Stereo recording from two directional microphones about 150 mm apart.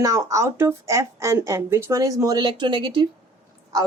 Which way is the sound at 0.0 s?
20° right (ahead or behind).